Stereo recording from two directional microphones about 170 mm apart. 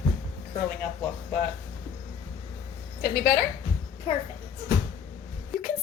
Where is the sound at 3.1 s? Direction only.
60° left (ahead or behind).